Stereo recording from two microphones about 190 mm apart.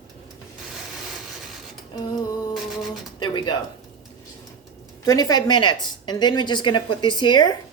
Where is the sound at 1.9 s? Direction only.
20° left (ahead or behind).